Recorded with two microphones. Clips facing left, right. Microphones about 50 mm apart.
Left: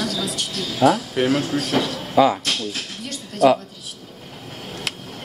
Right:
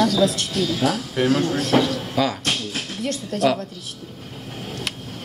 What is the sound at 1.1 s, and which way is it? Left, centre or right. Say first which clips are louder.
Speech: even; centre.